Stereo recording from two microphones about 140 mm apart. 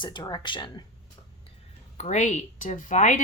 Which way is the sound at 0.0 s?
30° left (ahead or behind).